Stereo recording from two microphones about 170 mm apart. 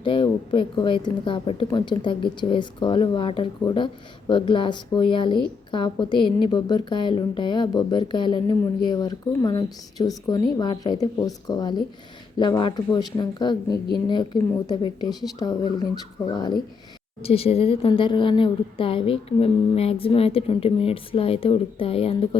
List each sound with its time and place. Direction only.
0.0 s speech: 30° left (ahead or behind)
17.2 s a woman's voice: 35° left (ahead or behind)